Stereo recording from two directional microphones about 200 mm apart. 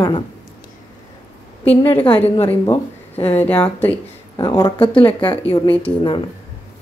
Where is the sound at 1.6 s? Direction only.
30° left (ahead or behind).